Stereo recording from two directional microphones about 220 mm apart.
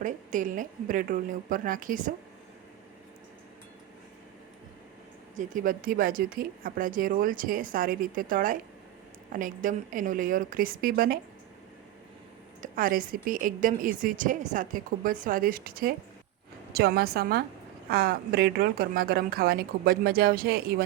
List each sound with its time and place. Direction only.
0.0 s a woman's voice: 35° right (ahead or behind)
5.4 s a woman's voice: 35° right (ahead or behind)
12.6 s a woman's voice: 40° right (ahead or behind)